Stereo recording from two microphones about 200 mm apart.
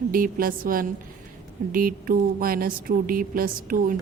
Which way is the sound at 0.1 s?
45° right (ahead or behind).